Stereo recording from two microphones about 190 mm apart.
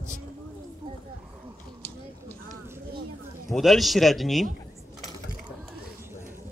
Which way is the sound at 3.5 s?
Centre (ahead or behind).